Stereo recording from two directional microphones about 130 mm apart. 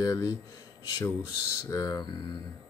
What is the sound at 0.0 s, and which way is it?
Speech, 25° left (ahead or behind).